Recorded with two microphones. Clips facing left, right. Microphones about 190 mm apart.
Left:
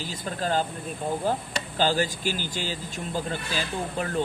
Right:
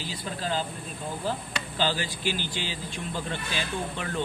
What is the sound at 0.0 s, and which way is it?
Speech, 45° left (ahead or behind).